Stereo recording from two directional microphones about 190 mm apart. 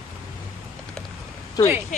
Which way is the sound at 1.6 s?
20° left (ahead or behind).